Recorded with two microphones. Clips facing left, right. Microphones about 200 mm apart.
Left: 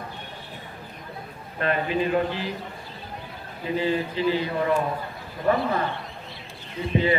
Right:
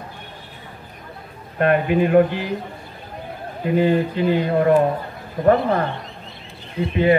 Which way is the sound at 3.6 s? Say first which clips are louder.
Right 7 dB; 55° right (ahead or behind).